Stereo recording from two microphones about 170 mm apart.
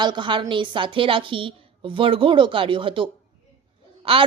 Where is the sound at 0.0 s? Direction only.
25° right (ahead or behind).